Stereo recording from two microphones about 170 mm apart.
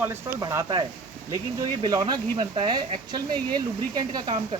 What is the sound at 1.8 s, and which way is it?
Speech, 25° right (ahead or behind).